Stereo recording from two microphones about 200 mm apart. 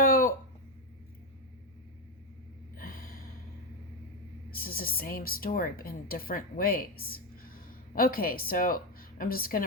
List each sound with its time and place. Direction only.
0.0 s a sound: 45° left (ahead or behind)
2.7 s gasp: 45° left (ahead or behind)
4.5 s speech: 45° left (ahead or behind)